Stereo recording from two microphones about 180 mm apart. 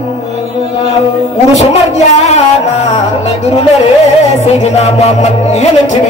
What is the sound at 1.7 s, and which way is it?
Music, 40° left (ahead or behind).